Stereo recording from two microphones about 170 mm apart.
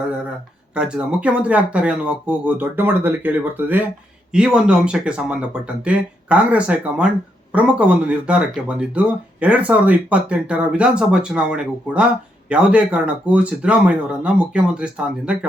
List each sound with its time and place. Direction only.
0.8 s speech: 5° right (ahead or behind)